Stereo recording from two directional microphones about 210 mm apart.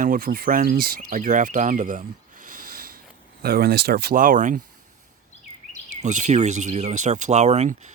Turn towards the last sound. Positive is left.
turn(degrees=-35)  # may be behind; listen again after turning